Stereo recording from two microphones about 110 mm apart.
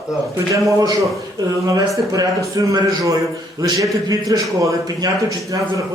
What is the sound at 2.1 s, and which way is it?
A man's voice, 30° right (ahead or behind).